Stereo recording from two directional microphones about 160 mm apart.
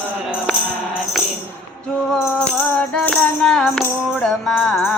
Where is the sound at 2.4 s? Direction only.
5° left (ahead or behind).